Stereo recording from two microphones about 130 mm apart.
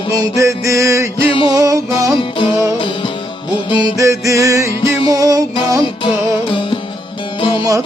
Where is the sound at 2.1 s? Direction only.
40° left (ahead or behind).